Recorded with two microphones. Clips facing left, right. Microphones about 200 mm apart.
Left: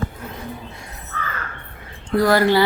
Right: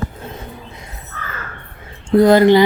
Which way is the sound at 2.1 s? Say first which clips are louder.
Right 7 dB; 20° right (ahead or behind).